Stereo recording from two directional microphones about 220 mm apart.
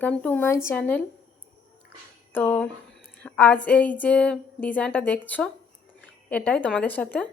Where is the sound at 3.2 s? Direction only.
5° left (ahead or behind).